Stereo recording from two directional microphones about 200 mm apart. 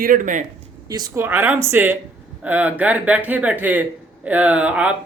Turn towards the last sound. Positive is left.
turn(degrees=-5)  # may be behind; listen again after turning